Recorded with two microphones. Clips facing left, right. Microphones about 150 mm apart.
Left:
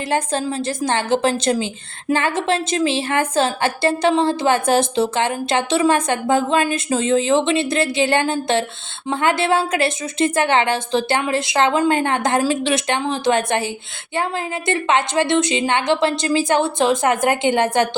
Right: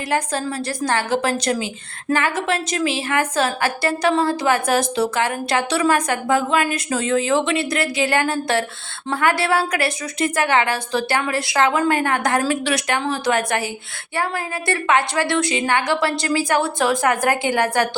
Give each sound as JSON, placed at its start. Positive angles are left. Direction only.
{"t": 0.1, "sound": "a woman's voice", "side_deg": 25}